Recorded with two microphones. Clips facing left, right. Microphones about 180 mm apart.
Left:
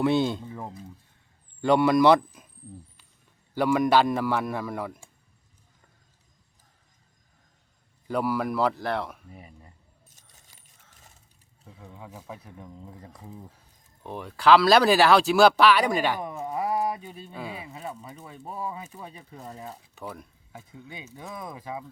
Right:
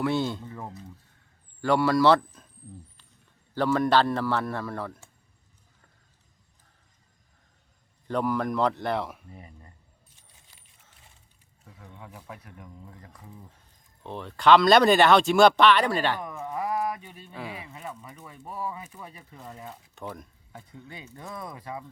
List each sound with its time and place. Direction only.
0.0 s speech: 20° left (ahead or behind)
3.5 s a man's voice: 10° left (ahead or behind)
8.0 s speech: 5° left (ahead or behind)
9.3 s a man's voice: 10° left (ahead or behind)
10.3 s coin: 45° left (ahead or behind)
11.9 s speech: 20° left (ahead or behind)
14.0 s speech: 10° left (ahead or behind)
16.4 s a sound: 25° left (ahead or behind)
17.3 s a man's voice: 15° left (ahead or behind)
17.7 s speech: 30° left (ahead or behind)
20.0 s speech: 5° left (ahead or behind)
21.3 s a man's voice: 15° left (ahead or behind)